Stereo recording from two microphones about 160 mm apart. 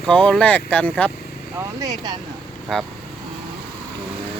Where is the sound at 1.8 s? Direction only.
25° right (ahead or behind).